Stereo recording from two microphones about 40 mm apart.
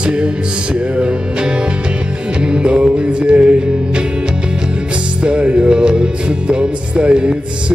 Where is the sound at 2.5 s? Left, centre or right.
Right.